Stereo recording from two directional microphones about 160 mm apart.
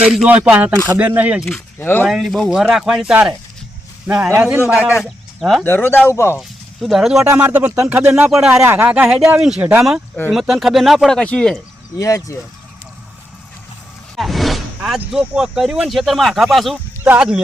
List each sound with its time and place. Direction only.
0.0 s speech: 5° right (ahead or behind)
1.8 s speech: 15° left (ahead or behind)
2.0 s speech: centre (ahead or behind)
5.6 s speech: 15° left (ahead or behind)
6.8 s speech: centre (ahead or behind)
7.3 s speech: 15° right (ahead or behind); by 11.6 s 5° left (ahead or behind)
11.9 s speech: 20° left (ahead or behind)
14.2 s speech: centre (ahead or behind)